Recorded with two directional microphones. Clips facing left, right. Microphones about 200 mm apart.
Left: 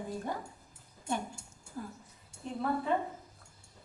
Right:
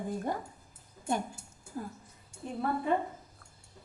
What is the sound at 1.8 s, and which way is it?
Speech, 45° right (ahead or behind).